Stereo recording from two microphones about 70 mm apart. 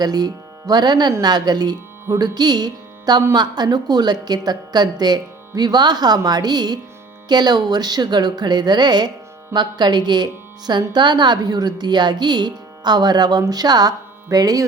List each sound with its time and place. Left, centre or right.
0.0 s a woman's voice: right
13.4 s speech: right